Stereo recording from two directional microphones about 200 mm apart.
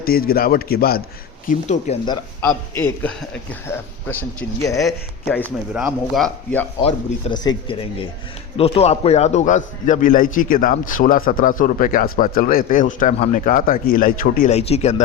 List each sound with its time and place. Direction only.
0.0 s a man's voice: 50° left (ahead or behind)
1.5 s a man's voice: 35° left (ahead or behind)
2.4 s a man's voice: 10° left (ahead or behind)
4.8 s speech: centre (ahead or behind)
6.8 s a man's voice: 20° left (ahead or behind)